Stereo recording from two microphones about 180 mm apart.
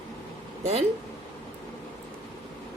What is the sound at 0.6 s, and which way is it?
Speech, 35° right (ahead or behind).